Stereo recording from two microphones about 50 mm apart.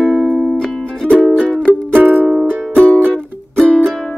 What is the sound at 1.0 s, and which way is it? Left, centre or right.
Music, centre.